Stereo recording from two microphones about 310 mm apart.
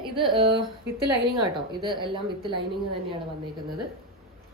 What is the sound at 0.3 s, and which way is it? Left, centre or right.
Speech, centre.